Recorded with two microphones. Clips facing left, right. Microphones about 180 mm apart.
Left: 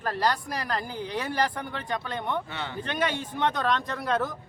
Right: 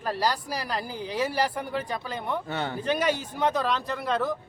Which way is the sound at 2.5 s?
45° right (ahead or behind).